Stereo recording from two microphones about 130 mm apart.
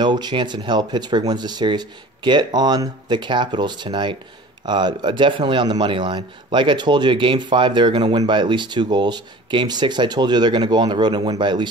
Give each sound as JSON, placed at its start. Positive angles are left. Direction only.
{"t": 0.0, "sound": "a man's voice", "side_deg": -35}